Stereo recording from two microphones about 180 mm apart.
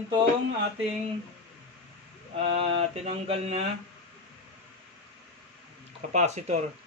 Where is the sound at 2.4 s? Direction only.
35° right (ahead or behind).